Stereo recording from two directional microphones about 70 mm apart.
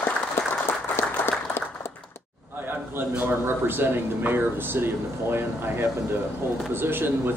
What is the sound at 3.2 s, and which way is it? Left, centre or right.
Speech, right.